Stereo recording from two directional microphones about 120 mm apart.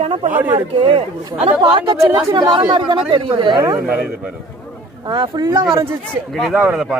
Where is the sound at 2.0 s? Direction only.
40° right (ahead or behind).